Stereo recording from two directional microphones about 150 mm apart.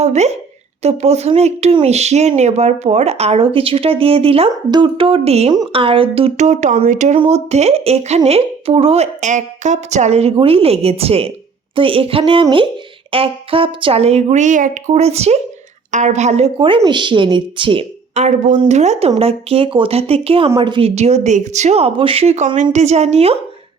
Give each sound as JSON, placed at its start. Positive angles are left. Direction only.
{"t": 0.0, "sound": "a woman's voice", "side_deg": -45}
{"t": 16.6, "sound": "a woman's voice", "side_deg": -35}
{"t": 20.9, "sound": "speech", "side_deg": -50}